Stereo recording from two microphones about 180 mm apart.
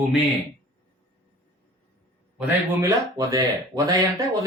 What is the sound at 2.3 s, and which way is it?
Speech, 10° right (ahead or behind).